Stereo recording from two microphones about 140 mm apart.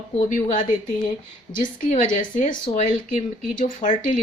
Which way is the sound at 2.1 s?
60° left (ahead or behind).